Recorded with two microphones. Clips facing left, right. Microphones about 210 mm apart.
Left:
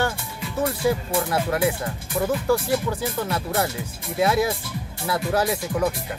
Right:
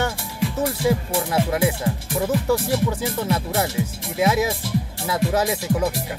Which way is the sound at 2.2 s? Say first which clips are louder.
Right 1 dB; 5° right (ahead or behind).